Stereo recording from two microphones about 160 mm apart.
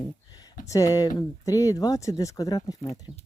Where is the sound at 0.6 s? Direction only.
20° left (ahead or behind).